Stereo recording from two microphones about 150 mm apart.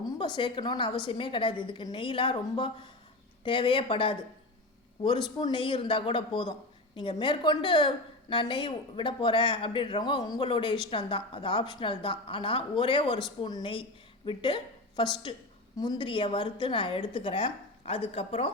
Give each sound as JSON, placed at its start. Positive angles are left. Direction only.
{"t": 0.2, "sound": "a woman's voice", "side_deg": 35}